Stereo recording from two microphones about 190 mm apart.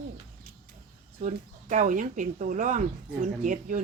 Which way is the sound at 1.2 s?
40° right (ahead or behind).